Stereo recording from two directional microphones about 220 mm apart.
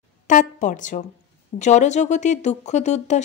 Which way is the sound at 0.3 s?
35° left (ahead or behind).